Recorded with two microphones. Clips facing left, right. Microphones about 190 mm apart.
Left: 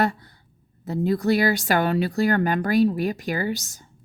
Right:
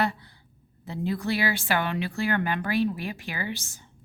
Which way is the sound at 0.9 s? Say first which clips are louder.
Left 7 dB; 40° left (ahead or behind).